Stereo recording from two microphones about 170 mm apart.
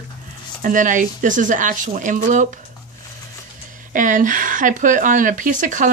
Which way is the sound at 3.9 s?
50° right (ahead or behind).